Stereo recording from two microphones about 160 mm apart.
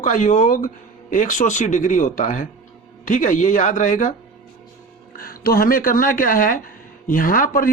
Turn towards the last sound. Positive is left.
turn(degrees=60)  # may be behind; listen again after turning